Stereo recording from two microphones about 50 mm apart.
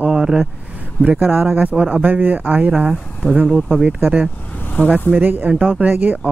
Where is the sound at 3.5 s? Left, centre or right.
Right.